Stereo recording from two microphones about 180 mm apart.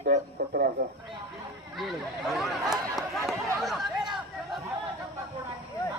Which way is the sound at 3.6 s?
Centre (ahead or behind).